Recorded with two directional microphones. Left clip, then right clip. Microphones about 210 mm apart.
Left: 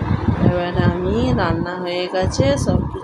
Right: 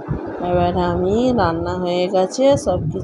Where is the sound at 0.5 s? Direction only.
20° right (ahead or behind).